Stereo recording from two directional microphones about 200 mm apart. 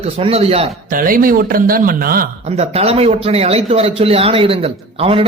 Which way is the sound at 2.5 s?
30° right (ahead or behind).